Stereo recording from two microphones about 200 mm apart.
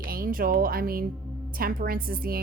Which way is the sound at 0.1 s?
45° right (ahead or behind).